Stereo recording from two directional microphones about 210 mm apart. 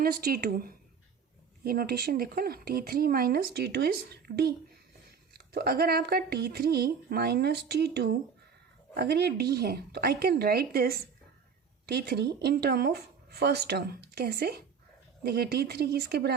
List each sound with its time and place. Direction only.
0.0 s speech: 45° right (ahead or behind)